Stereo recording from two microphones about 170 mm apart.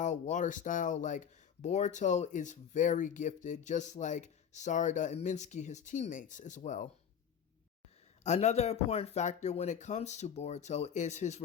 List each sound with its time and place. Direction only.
0.0 s speech: 45° left (ahead or behind)
8.2 s speech: 40° left (ahead or behind)